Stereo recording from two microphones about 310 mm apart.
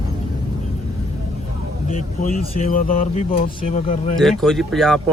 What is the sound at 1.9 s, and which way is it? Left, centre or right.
Speech, left.